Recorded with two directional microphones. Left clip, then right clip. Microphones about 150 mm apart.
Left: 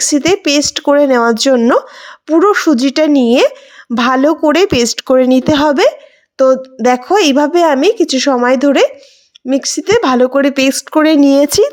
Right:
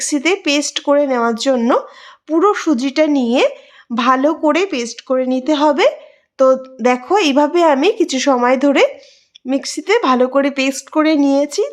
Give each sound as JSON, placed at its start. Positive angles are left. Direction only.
{"t": 0.0, "sound": "speech", "side_deg": 30}
{"t": 6.3, "sound": "a sound", "side_deg": 20}
{"t": 6.8, "sound": "speech", "side_deg": 30}